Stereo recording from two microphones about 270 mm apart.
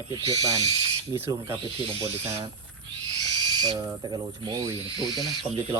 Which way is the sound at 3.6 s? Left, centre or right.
Centre.